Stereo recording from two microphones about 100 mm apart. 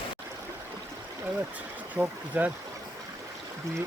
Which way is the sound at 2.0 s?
20° right (ahead or behind).